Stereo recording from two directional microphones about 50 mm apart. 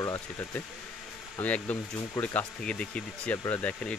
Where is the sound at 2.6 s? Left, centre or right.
Left.